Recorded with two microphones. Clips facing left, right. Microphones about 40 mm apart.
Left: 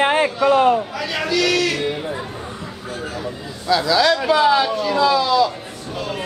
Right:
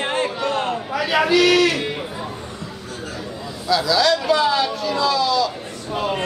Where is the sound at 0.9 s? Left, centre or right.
Centre.